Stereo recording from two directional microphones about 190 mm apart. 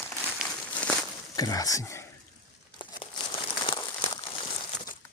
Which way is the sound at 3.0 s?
30° left (ahead or behind).